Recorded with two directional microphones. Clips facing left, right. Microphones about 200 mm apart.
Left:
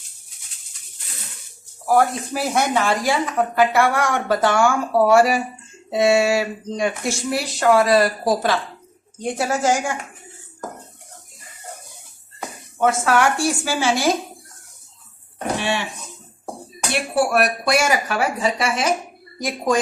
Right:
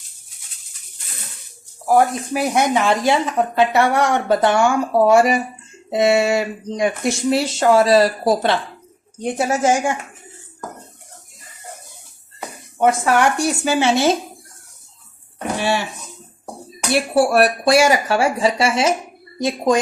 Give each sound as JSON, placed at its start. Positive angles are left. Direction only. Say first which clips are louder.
{"t": 1.9, "sound": "speech", "louder": "right 2 dB", "side_deg": -15}
{"t": 12.8, "sound": "speech", "louder": "right 2 dB", "side_deg": -15}
{"t": 16.9, "sound": "speech", "louder": "right 4 dB", "side_deg": -35}